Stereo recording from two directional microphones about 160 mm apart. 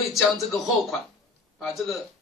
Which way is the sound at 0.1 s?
Centre (ahead or behind).